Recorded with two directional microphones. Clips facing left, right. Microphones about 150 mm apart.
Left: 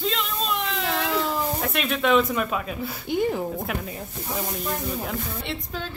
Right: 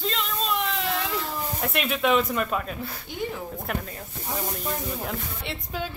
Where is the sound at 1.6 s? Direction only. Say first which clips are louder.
Right 2 dB; 5° right (ahead or behind).